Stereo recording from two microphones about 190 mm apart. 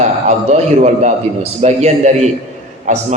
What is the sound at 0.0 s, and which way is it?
A man's voice, 35° right (ahead or behind).